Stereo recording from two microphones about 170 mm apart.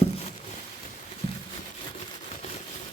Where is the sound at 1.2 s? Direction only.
35° left (ahead or behind).